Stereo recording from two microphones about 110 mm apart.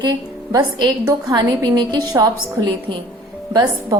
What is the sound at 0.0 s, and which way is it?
A woman's voice, 40° right (ahead or behind).